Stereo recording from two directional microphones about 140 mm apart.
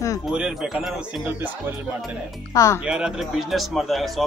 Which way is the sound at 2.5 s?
20° left (ahead or behind).